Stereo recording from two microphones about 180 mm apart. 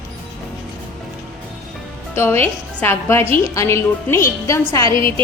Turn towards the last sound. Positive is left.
turn(degrees=15)  # may be behind; listen again after turning